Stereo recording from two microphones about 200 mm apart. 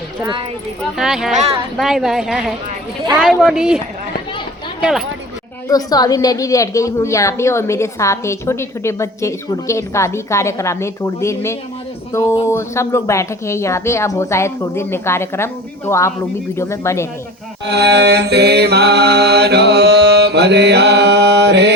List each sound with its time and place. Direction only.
0.8 s a woman's voice: centre (ahead or behind)
4.8 s speech: centre (ahead or behind)
5.6 s a woman's voice: 20° left (ahead or behind)
17.7 s mantra: 55° right (ahead or behind)